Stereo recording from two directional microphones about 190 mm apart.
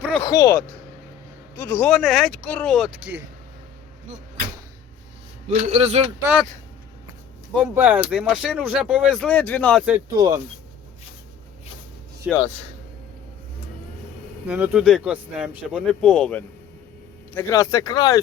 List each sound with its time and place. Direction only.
0.2 s speech: 15° left (ahead or behind)
1.6 s speech: 15° left (ahead or behind)
1.9 s speech: centre (ahead or behind)
5.7 s speech: 30° right (ahead or behind)
6.2 s speech: centre (ahead or behind)
7.8 s speech: 10° right (ahead or behind); by 9.8 s 10° left (ahead or behind)
10.1 s speech: 20° right (ahead or behind)
12.3 s speech: 5° right (ahead or behind)
14.4 s speech: 5° right (ahead or behind)
17.3 s speech: 15° left (ahead or behind)